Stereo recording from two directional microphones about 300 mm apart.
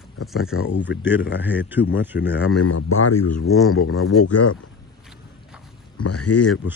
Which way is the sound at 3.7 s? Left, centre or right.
Left.